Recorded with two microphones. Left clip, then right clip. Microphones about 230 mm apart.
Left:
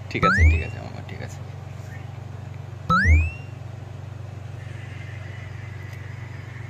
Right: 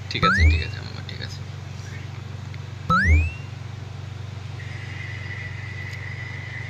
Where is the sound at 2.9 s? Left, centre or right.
Centre.